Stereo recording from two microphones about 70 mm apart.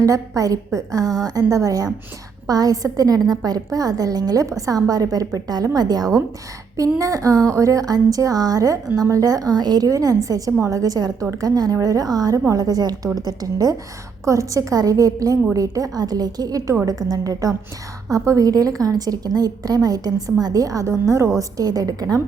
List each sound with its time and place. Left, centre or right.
0.0 s a woman's voice: right
6.7 s a woman's voice: right
14.3 s a woman's voice: right
21.3 s a woman's voice: right